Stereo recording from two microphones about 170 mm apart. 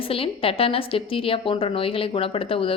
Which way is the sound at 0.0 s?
35° left (ahead or behind).